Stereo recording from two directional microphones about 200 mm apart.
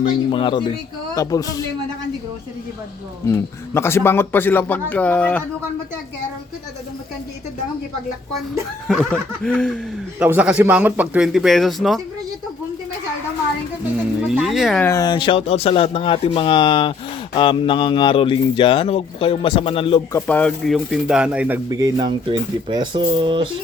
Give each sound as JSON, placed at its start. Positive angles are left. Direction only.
{"t": 0.3, "sound": "a man's voice", "side_deg": 25}
{"t": 3.2, "sound": "a man's voice", "side_deg": 15}
{"t": 8.9, "sound": "speech", "side_deg": 5}
{"t": 10.2, "sound": "speech", "side_deg": -5}
{"t": 14.3, "sound": "speech", "side_deg": 0}
{"t": 14.8, "sound": "speech", "side_deg": 20}
{"t": 20.1, "sound": "speech", "side_deg": 5}